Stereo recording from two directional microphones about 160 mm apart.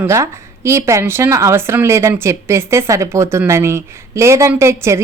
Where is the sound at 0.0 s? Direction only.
15° right (ahead or behind).